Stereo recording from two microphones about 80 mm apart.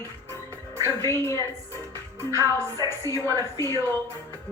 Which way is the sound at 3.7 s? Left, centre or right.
Right.